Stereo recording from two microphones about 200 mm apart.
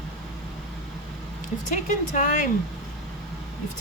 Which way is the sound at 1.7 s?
40° left (ahead or behind).